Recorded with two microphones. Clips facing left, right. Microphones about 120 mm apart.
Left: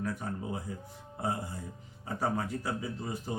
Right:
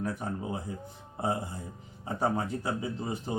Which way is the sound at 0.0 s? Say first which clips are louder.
Right 2 dB; 25° right (ahead or behind).